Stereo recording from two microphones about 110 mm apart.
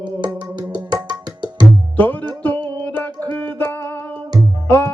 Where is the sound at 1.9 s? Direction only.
15° left (ahead or behind).